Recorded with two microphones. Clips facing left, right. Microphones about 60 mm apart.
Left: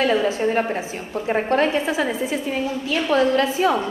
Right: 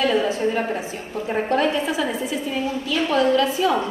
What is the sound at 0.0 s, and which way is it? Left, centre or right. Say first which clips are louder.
Speech: left 1 dB; left.